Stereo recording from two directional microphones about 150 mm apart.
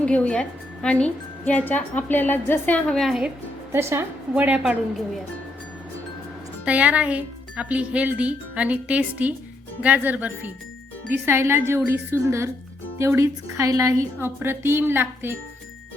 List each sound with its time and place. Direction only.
0.0 s a woman's voice: 10° left (ahead or behind)
3.7 s speech: 15° right (ahead or behind)
6.7 s speech: 10° right (ahead or behind)